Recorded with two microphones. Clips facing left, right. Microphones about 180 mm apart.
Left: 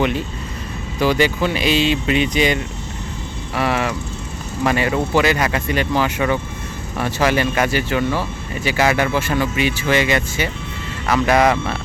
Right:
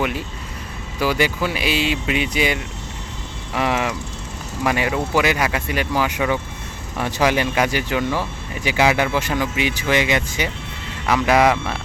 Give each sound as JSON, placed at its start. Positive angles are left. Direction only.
{"t": 0.9, "sound": "speech", "side_deg": -10}